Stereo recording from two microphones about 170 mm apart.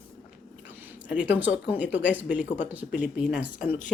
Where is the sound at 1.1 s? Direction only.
10° right (ahead or behind).